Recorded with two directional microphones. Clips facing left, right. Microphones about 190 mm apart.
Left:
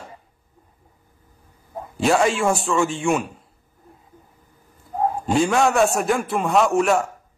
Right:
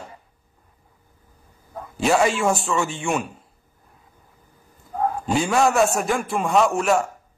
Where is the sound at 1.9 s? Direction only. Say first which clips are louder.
Left 1 dB; centre (ahead or behind).